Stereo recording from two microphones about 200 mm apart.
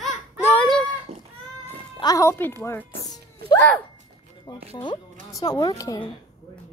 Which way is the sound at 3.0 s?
20° left (ahead or behind).